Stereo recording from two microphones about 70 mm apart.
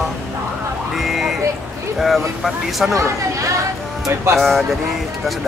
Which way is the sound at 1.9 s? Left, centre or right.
Centre.